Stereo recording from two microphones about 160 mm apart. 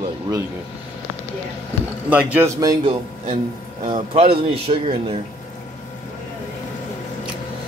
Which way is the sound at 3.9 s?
35° right (ahead or behind).